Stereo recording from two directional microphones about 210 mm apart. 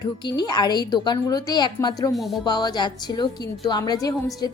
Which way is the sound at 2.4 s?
20° left (ahead or behind).